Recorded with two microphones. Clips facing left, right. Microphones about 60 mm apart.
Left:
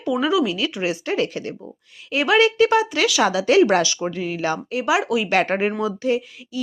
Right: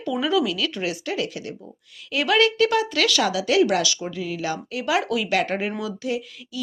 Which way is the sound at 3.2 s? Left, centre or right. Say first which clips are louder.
Left 7 dB; left.